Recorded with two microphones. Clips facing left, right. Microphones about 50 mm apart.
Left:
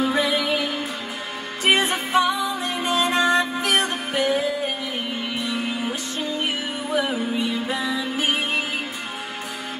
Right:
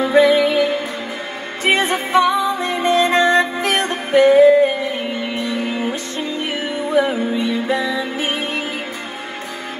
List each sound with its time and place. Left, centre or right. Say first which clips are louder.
0.0 s music: right 9 dB; right